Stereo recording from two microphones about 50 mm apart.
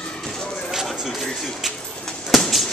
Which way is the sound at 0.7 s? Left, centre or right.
Centre.